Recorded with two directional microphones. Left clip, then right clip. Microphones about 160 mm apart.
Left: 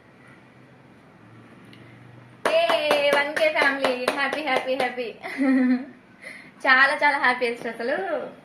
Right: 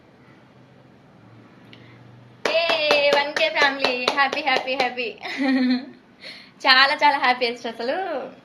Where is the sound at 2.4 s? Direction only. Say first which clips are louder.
Even; 15° right (ahead or behind).